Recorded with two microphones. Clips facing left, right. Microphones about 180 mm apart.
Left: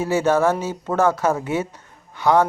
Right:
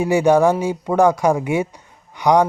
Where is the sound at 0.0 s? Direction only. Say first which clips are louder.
Right 4 dB; 15° right (ahead or behind).